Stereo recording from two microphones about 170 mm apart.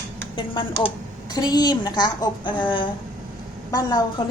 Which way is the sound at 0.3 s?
30° left (ahead or behind).